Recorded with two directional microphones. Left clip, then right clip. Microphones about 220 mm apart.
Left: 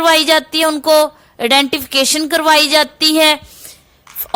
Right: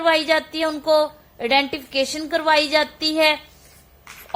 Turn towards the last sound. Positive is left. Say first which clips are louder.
# left 7 dB
turn(degrees=40)  # may be behind; listen again after turning